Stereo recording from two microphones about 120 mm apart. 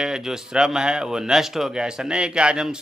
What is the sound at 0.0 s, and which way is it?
Speech, 5° right (ahead or behind).